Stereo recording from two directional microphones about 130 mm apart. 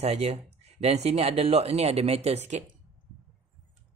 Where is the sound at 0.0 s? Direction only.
55° right (ahead or behind).